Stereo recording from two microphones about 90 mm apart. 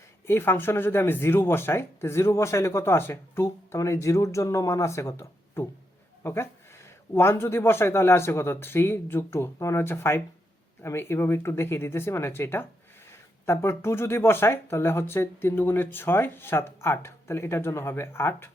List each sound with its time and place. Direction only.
0.3 s speech: 25° left (ahead or behind)